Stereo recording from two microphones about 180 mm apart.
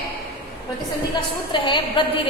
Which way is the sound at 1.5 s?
25° left (ahead or behind).